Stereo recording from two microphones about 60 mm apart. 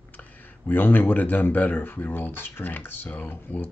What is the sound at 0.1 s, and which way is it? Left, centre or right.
Speech, left.